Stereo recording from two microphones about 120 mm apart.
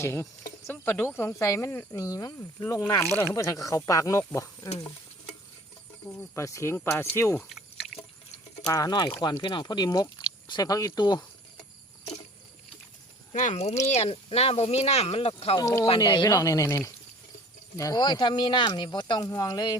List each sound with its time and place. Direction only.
0.0 s speech: 20° left (ahead or behind)
6.3 s speech: 25° left (ahead or behind)
7.3 s a sound: centre (ahead or behind)
8.6 s speech: 30° left (ahead or behind)
13.3 s speech: 80° left; by 15.6 s 55° left (ahead or behind)
15.6 s speech: 25° left (ahead or behind)
16.0 s speech: 40° left (ahead or behind)
19.3 s speech: 30° left (ahead or behind)